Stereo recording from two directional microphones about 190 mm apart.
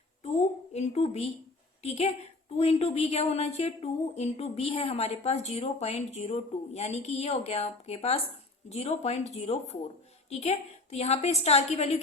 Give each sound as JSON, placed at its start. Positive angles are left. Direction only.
{"t": 0.7, "sound": "speech", "side_deg": 35}